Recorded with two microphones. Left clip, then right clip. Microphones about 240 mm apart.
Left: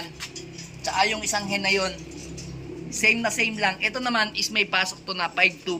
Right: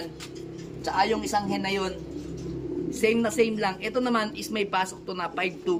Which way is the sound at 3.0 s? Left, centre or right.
Centre.